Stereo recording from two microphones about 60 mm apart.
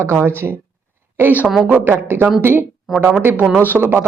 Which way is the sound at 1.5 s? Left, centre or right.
Centre.